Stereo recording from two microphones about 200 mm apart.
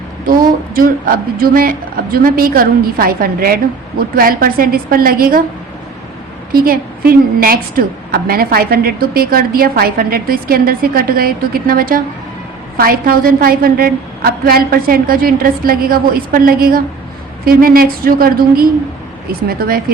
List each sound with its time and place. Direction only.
0.8 s a woman's voice: 45° right (ahead or behind)
6.5 s a woman's voice: 45° right (ahead or behind)